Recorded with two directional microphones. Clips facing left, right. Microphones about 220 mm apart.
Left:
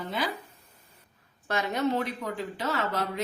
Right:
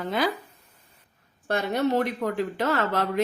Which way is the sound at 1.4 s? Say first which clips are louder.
Right 4 dB; 60° right (ahead or behind).